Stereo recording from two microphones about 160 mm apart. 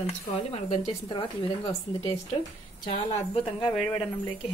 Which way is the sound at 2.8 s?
45° left (ahead or behind).